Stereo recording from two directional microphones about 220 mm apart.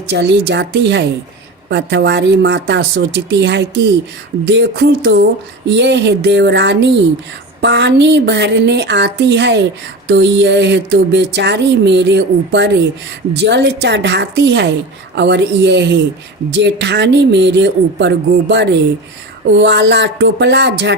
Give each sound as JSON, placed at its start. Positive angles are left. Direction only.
{"t": 0.1, "sound": "speech", "side_deg": -50}